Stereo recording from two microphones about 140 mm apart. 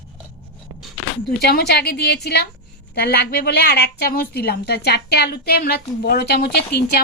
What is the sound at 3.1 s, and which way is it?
A woman's voice, 90° left.